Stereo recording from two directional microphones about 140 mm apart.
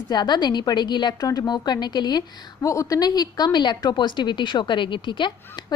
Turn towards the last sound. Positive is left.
turn(degrees=30)  # may be behind; listen again after turning